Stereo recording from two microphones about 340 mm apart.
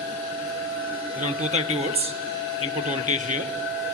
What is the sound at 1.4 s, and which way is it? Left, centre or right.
Speech, centre.